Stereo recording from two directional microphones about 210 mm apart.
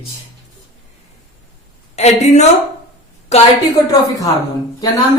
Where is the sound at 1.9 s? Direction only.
30° left (ahead or behind).